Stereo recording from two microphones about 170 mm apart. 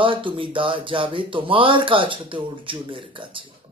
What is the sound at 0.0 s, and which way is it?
Speech, 30° right (ahead or behind).